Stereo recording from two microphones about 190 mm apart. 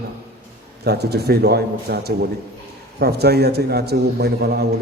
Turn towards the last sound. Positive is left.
turn(degrees=-60)  # may be behind; listen again after turning